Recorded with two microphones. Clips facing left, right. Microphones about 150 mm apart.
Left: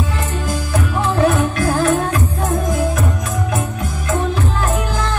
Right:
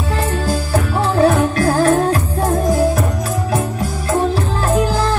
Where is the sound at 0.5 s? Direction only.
35° right (ahead or behind).